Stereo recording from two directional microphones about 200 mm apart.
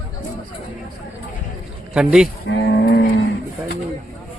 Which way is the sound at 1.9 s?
5° right (ahead or behind).